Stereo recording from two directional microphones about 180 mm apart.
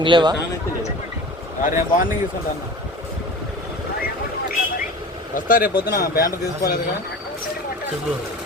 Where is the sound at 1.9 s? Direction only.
50° left (ahead or behind).